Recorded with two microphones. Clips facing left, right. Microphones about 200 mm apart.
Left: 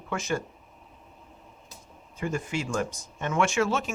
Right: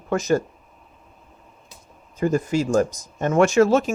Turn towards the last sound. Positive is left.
turn(degrees=-40)  # may be behind; listen again after turning